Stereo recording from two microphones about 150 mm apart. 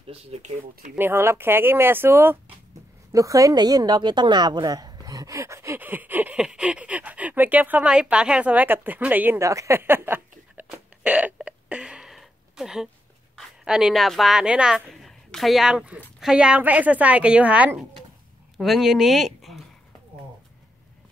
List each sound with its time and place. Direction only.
0.0 s speech: 40° right (ahead or behind)
0.9 s a woman's voice: 15° right (ahead or behind)